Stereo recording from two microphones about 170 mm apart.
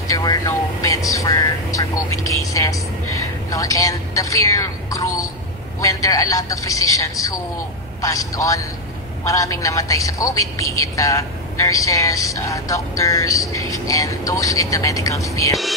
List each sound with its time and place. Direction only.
0.1 s a man's voice: 20° left (ahead or behind)